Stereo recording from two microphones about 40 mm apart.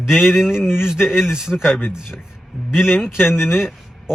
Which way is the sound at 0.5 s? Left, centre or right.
Centre.